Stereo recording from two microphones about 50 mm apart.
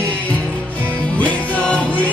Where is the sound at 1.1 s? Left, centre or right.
Left.